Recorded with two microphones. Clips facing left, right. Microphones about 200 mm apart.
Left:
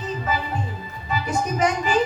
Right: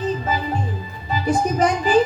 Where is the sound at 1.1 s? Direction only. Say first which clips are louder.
Right 5 dB; 35° right (ahead or behind).